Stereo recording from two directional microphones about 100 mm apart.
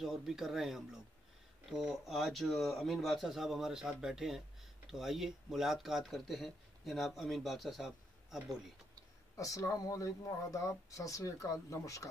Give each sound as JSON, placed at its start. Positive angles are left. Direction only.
{"t": 0.0, "sound": "speech", "side_deg": -5}
{"t": 9.4, "sound": "speech", "side_deg": 35}